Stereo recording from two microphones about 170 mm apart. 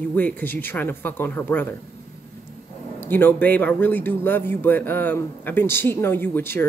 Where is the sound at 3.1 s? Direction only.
10° left (ahead or behind).